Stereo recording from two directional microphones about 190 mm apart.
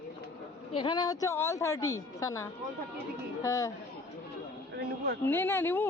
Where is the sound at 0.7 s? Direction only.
25° left (ahead or behind).